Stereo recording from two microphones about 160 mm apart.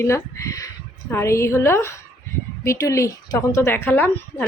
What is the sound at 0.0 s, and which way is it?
A woman's voice, 20° left (ahead or behind).